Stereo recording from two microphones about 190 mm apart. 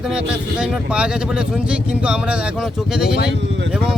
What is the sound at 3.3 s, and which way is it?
Vehicle, 70° right (ahead or behind).